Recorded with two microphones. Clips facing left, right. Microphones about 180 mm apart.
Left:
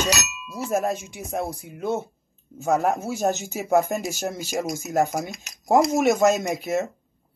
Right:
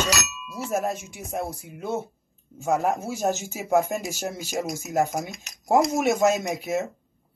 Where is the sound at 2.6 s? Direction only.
Centre (ahead or behind).